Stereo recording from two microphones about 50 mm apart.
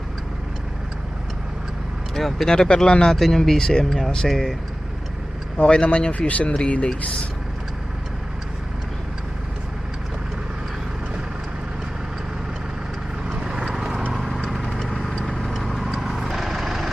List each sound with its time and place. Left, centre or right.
2.1 s speech: centre
5.5 s speech: left
13.2 s vehicle: centre
13.7 s clip-clop: centre
14.2 s vehicle: centre